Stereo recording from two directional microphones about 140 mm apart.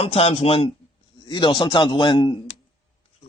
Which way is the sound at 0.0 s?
45° left (ahead or behind).